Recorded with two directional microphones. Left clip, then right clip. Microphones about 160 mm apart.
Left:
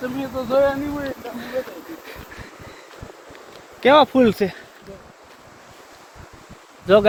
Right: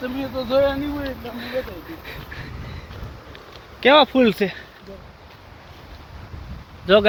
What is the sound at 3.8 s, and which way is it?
Speech, 15° left (ahead or behind).